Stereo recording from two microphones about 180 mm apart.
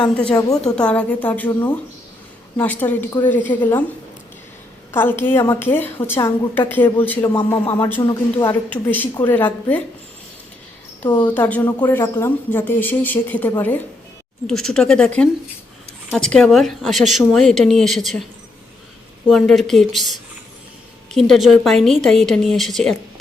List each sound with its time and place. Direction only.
0.3 s speech: 20° left (ahead or behind)
0.8 s a woman's voice: 5° left (ahead or behind)
4.9 s a woman's voice: 10° left (ahead or behind)
11.2 s a woman's voice: 10° left (ahead or behind)
19.3 s a woman's voice: centre (ahead or behind)